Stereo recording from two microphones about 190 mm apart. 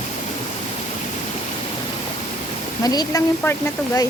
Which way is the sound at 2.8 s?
20° left (ahead or behind).